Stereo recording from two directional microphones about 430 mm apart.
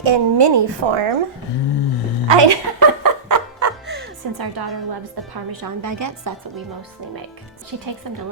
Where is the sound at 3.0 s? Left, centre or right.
Right.